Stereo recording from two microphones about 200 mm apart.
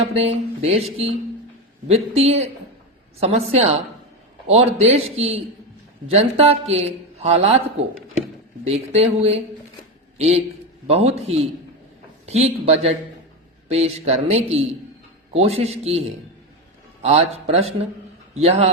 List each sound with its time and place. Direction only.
0.0 s speech: 30° right (ahead or behind)
8.6 s a man's voice: 30° right (ahead or behind)